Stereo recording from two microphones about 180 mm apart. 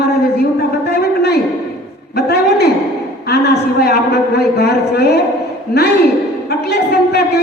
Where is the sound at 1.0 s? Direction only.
65° left (ahead or behind).